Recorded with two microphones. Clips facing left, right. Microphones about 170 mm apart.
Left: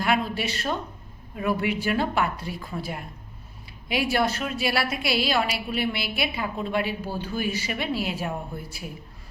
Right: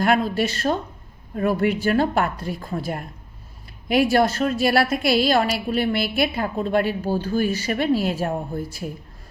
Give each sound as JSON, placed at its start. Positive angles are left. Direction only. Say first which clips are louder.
{"t": 0.0, "sound": "a woman's voice", "louder": "right 5 dB", "side_deg": -45}